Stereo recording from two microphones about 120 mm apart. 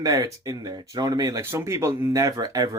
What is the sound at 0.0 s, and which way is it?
Speech, 30° right (ahead or behind).